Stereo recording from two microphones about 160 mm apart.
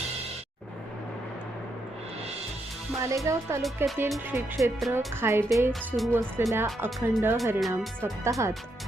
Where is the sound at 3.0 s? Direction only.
20° right (ahead or behind).